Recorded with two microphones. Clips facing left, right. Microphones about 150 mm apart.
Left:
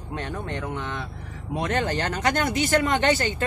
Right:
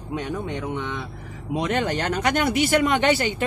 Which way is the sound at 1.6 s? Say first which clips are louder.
Right 1 dB; 15° right (ahead or behind).